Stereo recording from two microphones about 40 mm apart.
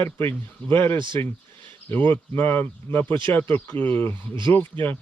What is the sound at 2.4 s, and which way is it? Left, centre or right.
Speech, left.